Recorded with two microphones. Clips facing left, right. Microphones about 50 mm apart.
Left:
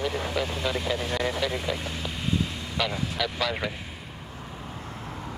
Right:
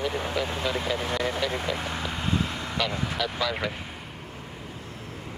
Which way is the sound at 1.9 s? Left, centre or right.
Right.